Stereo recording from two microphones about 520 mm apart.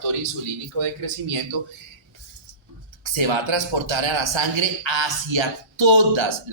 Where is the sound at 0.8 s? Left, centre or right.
Right.